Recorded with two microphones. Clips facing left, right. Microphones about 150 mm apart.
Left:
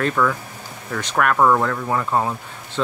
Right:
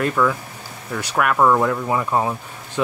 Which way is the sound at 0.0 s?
5° right (ahead or behind).